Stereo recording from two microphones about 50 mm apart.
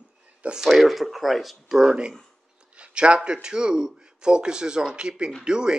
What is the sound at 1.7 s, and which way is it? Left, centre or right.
Speech, centre.